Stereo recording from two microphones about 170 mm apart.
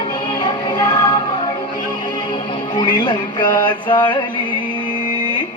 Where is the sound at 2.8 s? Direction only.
25° left (ahead or behind).